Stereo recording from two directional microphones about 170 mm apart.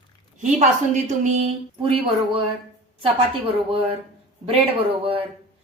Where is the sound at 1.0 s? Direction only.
45° right (ahead or behind).